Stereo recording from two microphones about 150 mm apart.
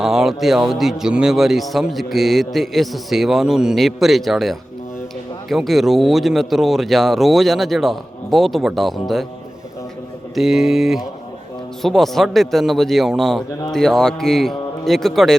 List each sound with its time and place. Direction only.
0.0 s a man's voice: centre (ahead or behind)
10.3 s a man's voice: centre (ahead or behind)